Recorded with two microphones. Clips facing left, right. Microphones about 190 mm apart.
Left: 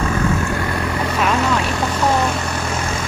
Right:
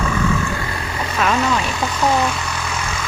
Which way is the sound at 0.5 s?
55° left (ahead or behind).